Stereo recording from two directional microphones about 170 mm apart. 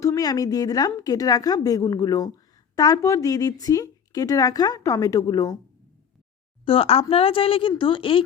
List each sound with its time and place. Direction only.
0.0 s speech: 20° left (ahead or behind)
6.7 s a woman's voice: 35° left (ahead or behind)